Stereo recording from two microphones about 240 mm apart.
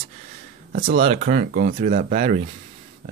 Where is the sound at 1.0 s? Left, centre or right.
Right.